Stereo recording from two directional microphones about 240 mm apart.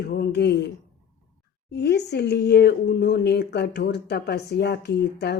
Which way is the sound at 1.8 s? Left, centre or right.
Left.